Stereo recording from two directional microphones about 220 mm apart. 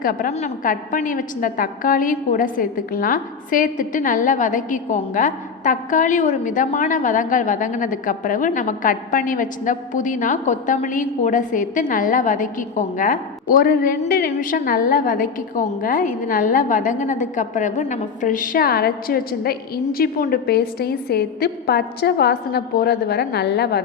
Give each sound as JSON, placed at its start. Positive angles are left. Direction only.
{"t": 0.0, "sound": "a woman's voice", "side_deg": 40}